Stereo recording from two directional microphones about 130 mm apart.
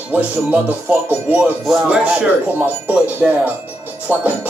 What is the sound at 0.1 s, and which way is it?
Music, 10° right (ahead or behind).